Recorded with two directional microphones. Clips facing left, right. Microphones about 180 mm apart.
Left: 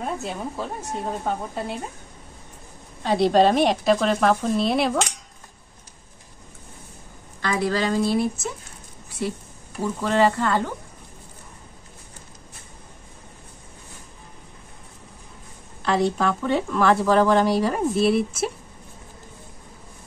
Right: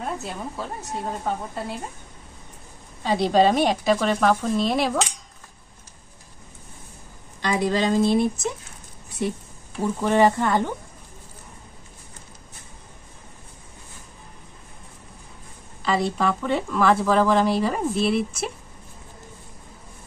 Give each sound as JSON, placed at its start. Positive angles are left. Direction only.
{"t": 0.0, "sound": "a woman's voice", "side_deg": 0}
{"t": 3.0, "sound": "a woman's voice", "side_deg": 0}
{"t": 7.4, "sound": "speech", "side_deg": -20}
{"t": 15.8, "sound": "a woman's voice", "side_deg": 0}